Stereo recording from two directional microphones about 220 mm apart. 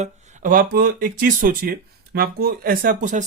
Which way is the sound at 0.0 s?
35° right (ahead or behind).